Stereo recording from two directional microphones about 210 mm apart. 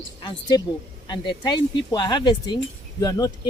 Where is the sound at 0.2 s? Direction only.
20° left (ahead or behind).